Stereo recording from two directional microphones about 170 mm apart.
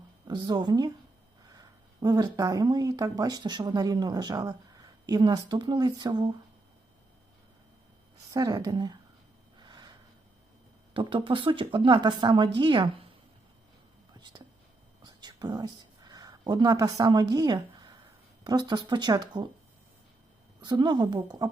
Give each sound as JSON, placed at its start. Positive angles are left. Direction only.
{"t": 0.3, "sound": "speech", "side_deg": -25}
{"t": 8.3, "sound": "speech", "side_deg": -20}
{"t": 9.6, "sound": "snort", "side_deg": -25}
{"t": 10.9, "sound": "speech", "side_deg": -30}
{"t": 14.2, "sound": "speech", "side_deg": -25}
{"t": 15.0, "sound": "whispering", "side_deg": -25}
{"t": 18.4, "sound": "speech", "side_deg": -25}
{"t": 20.6, "sound": "speech", "side_deg": -25}